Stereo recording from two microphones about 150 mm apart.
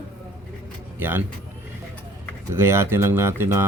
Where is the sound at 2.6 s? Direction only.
15° right (ahead or behind).